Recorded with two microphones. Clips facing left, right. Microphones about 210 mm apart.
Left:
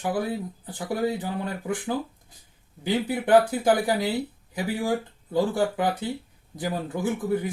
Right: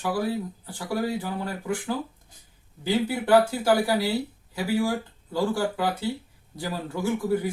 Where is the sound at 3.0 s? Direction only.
20° left (ahead or behind).